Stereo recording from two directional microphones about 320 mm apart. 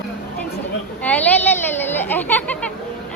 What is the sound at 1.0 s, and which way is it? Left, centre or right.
Speech, centre.